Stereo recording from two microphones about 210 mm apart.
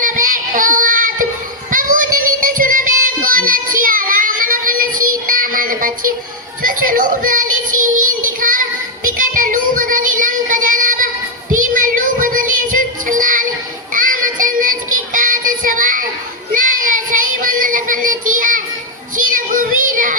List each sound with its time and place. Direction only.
0.0 s child singing: 40° right (ahead or behind)
9.0 s music: 40° right (ahead or behind)
11.6 s child singing: 40° right (ahead or behind)
19.1 s music: 40° right (ahead or behind)